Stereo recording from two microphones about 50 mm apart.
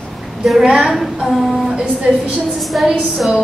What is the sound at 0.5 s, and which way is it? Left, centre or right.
Speech, centre.